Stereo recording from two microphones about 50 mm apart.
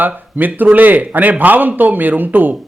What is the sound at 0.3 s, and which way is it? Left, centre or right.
Speech, right.